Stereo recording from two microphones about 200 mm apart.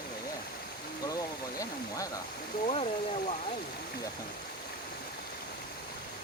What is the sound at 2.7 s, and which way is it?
Speech, 30° left (ahead or behind).